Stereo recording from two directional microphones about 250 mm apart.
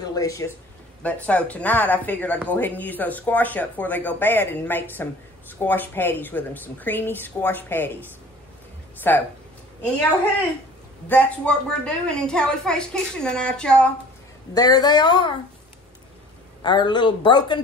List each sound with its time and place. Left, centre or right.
0.0 s a woman's voice: centre
11.1 s a woman's voice: centre
14.5 s speech: centre
16.6 s speech: centre